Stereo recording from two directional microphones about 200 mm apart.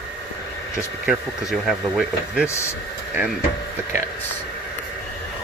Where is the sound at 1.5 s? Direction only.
Centre (ahead or behind).